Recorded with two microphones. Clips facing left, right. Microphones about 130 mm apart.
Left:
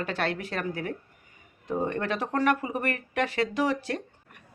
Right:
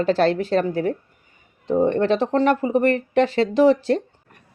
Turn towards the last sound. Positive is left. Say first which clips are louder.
# right 12 dB
turn(degrees=-30)  # may be behind; listen again after turning